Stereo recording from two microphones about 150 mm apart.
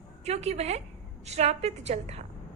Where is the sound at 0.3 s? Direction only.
45° right (ahead or behind).